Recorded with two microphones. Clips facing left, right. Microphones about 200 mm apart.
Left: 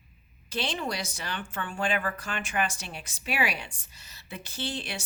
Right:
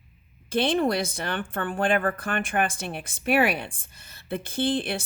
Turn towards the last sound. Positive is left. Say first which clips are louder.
# right 10 dB
turn(degrees=-55)  # may be behind; listen again after turning